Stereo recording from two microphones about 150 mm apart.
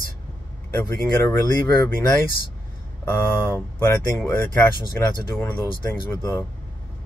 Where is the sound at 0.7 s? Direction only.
15° left (ahead or behind).